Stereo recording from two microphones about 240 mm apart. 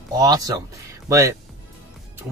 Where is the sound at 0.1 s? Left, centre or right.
Centre.